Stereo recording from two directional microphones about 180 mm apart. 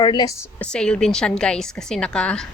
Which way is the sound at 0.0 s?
25° left (ahead or behind).